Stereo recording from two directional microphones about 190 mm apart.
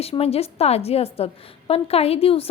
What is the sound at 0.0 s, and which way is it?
A woman's voice, 30° left (ahead or behind).